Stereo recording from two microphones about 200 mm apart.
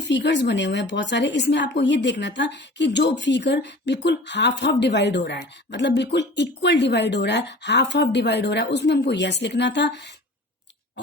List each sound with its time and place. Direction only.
0.0 s a woman's voice: 60° left (ahead or behind)